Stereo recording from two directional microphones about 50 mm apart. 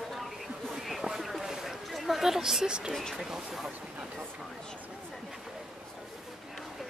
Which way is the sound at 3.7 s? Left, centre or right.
Right.